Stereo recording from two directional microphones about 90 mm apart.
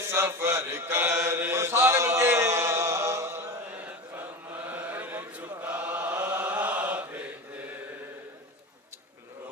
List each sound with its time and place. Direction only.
0.0 s mantra: 25° right (ahead or behind)
3.7 s chant: 15° right (ahead or behind)